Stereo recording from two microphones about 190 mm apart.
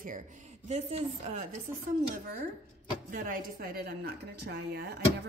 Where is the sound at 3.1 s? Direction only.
45° right (ahead or behind).